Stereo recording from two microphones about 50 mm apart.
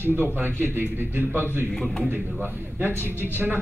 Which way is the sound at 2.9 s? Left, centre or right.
Left.